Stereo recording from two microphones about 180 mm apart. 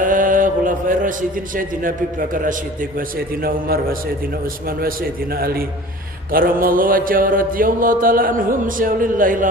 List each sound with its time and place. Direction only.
0.0 s a man's voice: 50° right (ahead or behind)
6.3 s mantra: 50° right (ahead or behind)